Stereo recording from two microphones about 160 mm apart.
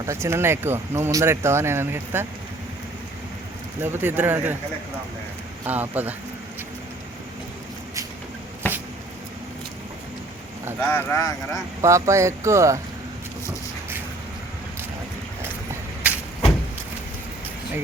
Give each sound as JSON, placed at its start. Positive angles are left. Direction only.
{"t": 0.0, "sound": "speech", "side_deg": -15}
{"t": 3.8, "sound": "speech", "side_deg": -15}
{"t": 5.6, "sound": "speech", "side_deg": -10}
{"t": 8.6, "sound": "a sound", "side_deg": 10}
{"t": 10.8, "sound": "speech", "side_deg": 10}
{"t": 11.8, "sound": "speech", "side_deg": -20}
{"t": 16.0, "sound": "vehicle", "side_deg": -10}